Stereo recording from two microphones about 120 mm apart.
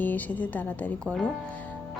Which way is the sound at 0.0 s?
15° left (ahead or behind).